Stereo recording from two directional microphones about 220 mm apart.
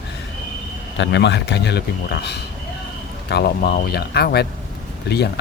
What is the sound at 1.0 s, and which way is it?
Speech, 50° left (ahead or behind).